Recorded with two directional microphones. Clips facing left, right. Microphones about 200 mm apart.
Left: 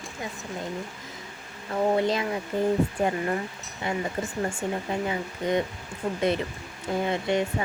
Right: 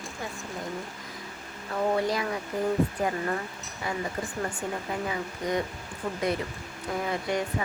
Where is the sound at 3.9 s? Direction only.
25° left (ahead or behind).